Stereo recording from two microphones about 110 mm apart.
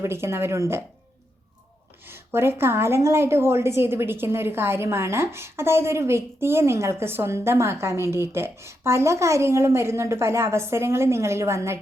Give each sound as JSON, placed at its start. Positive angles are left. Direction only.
{"t": 0.0, "sound": "a woman's voice", "side_deg": -25}
{"t": 2.0, "sound": "a woman's voice", "side_deg": -20}